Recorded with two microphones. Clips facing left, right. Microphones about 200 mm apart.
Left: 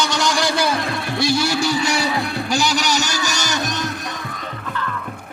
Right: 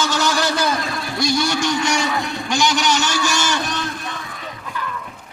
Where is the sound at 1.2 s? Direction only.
5° left (ahead or behind).